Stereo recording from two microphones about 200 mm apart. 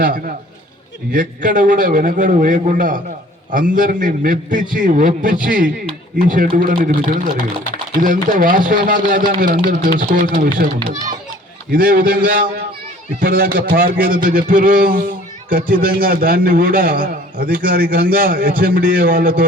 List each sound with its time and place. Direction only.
1.1 s a man's voice: 40° right (ahead or behind)
11.7 s a man's voice: 45° right (ahead or behind)